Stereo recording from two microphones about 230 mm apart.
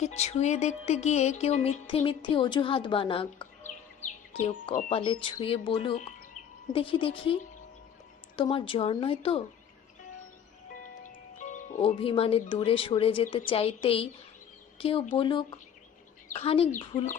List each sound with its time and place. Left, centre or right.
0.0 s music: left
8.4 s music: left
11.3 s speech: left
13.5 s music: left